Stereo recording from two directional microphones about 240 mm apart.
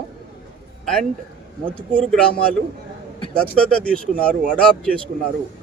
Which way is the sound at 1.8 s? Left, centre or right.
Centre.